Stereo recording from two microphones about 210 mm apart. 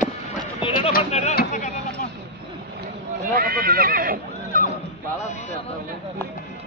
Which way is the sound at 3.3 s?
45° right (ahead or behind).